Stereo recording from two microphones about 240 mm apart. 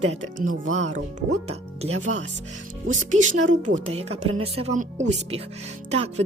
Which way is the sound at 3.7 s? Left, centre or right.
Right.